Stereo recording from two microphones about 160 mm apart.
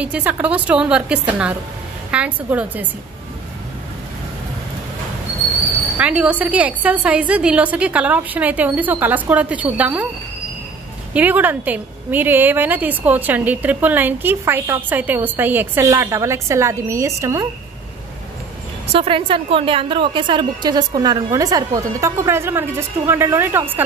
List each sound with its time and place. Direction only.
0.0 s a woman's voice: 10° right (ahead or behind)
5.9 s a woman's voice: 5° right (ahead or behind)
11.1 s a woman's voice: 10° right (ahead or behind)
18.9 s a woman's voice: 35° right (ahead or behind); by 23.8 s 15° right (ahead or behind)